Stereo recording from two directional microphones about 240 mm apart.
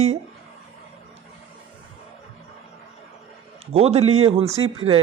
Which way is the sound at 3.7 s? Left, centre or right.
Right.